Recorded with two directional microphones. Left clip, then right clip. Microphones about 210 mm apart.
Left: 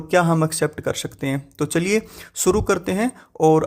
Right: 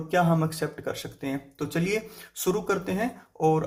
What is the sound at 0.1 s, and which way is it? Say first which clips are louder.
Speech: left 6 dB; 45° left (ahead or behind).